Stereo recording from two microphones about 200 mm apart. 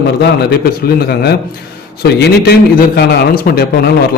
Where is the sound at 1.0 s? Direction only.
50° left (ahead or behind).